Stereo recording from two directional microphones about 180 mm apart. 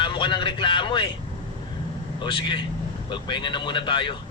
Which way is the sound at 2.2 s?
25° left (ahead or behind).